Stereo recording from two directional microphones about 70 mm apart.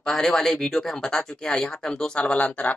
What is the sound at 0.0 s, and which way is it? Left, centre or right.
Speech, centre.